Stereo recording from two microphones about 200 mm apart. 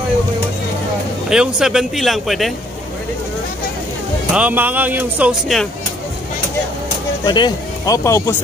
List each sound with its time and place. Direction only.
1.3 s speech: 5° right (ahead or behind)
4.3 s speech: 5° right (ahead or behind)
7.2 s speech: 20° left (ahead or behind)